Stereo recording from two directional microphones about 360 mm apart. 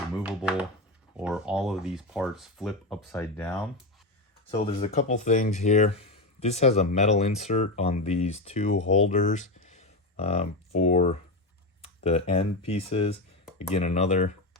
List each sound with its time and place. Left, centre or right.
0.2 s a sound: centre
1.1 s speech: centre
4.5 s speech: centre